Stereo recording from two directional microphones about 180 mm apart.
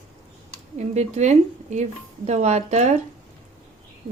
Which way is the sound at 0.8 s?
40° right (ahead or behind).